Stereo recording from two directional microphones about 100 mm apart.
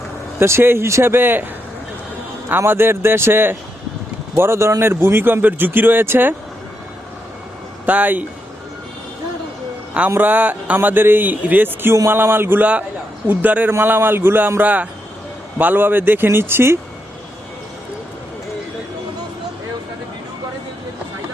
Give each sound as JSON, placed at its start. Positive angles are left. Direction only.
{"t": 0.3, "sound": "a man's voice", "side_deg": -25}
{"t": 2.5, "sound": "a man's voice", "side_deg": -20}
{"t": 7.9, "sound": "speech", "side_deg": -15}
{"t": 10.1, "sound": "a man's voice", "side_deg": -20}